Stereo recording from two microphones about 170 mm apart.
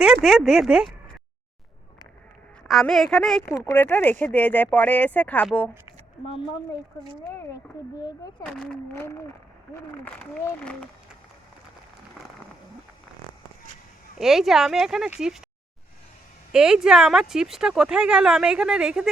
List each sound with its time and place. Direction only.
0.0 s speech: centre (ahead or behind)
2.6 s speech: centre (ahead or behind)
3.5 s speech: 15° left (ahead or behind)
6.2 s speech: 30° left (ahead or behind)
8.0 s speech: 20° left (ahead or behind)
8.4 s speech: 5° left (ahead or behind)
14.2 s speech: centre (ahead or behind)
16.5 s speech: 5° right (ahead or behind)